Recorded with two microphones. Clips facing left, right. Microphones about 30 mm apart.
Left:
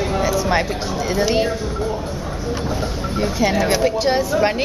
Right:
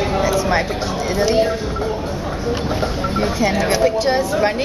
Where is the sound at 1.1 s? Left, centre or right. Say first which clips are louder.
Right 1 dB; centre.